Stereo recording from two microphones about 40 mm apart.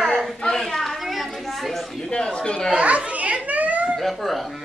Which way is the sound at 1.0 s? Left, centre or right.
Centre.